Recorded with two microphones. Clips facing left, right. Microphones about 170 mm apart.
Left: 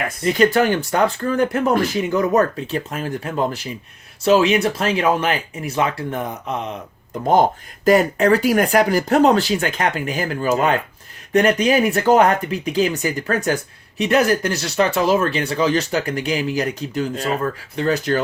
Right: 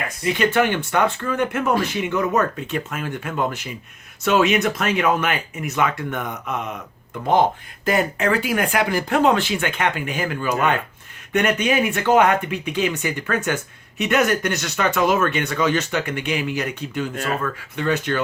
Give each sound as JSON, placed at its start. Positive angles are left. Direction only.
{"t": 0.3, "sound": "speech", "side_deg": 40}